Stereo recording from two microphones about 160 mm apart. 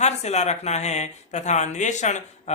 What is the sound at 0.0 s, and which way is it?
Speech, 45° left (ahead or behind).